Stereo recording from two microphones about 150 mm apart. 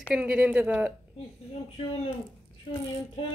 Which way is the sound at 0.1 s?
10° right (ahead or behind).